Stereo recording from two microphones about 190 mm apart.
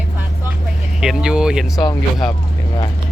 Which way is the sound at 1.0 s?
5° right (ahead or behind).